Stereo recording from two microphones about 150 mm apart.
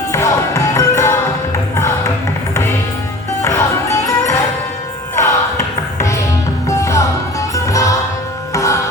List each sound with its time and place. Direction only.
0.1 s music: 20° left (ahead or behind)
3.4 s music: 20° left (ahead or behind)